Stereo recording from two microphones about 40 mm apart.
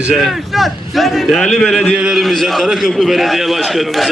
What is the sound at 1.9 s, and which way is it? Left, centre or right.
Speech, centre.